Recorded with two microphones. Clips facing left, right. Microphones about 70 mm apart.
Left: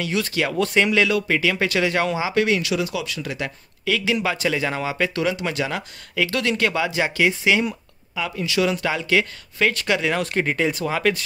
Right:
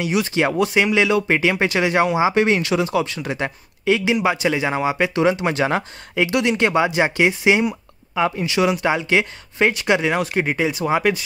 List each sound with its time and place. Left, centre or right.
0.0 s speech: centre
6.2 s speech: right